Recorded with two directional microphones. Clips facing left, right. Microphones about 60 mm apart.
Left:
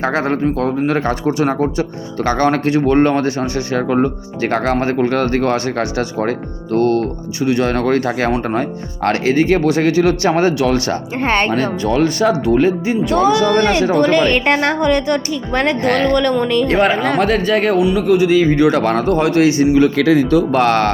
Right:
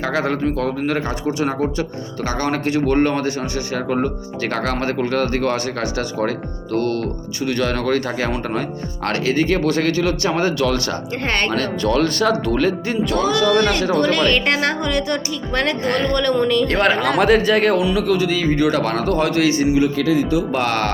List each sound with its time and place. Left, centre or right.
0.0 s speech: left
4.9 s speech: left; by 9.9 s centre
10.0 s speech: left
10.6 s speech: left
13.1 s speech: left
15.9 s speech: left
16.3 s speech: centre
17.2 s speech: centre
18.1 s speech: left
20.0 s speech: left